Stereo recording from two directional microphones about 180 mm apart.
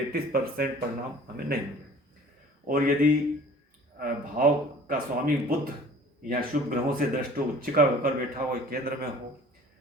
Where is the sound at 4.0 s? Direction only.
50° right (ahead or behind).